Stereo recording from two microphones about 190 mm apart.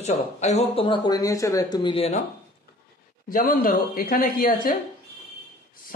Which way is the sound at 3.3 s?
45° left (ahead or behind).